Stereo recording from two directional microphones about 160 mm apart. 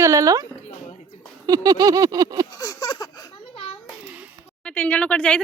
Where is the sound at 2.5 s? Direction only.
20° left (ahead or behind).